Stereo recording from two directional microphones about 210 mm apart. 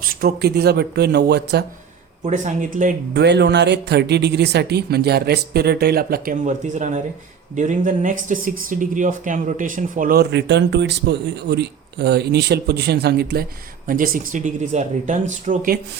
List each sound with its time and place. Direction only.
0.0 s speech: 45° right (ahead or behind)
2.2 s speech: 35° right (ahead or behind)
3.2 s speech: 55° right (ahead or behind)